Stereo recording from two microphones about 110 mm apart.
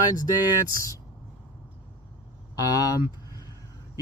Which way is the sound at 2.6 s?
35° left (ahead or behind).